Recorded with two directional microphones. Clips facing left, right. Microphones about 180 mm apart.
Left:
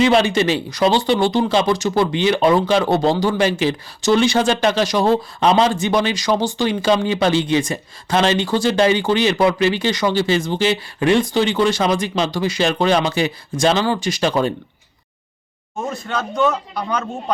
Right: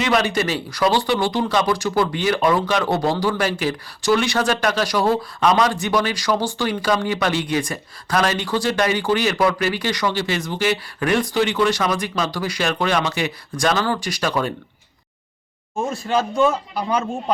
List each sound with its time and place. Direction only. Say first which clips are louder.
0.0 s speech: left 5 dB; 30° left (ahead or behind)
16.1 s a man's voice: right 1 dB; 15° right (ahead or behind)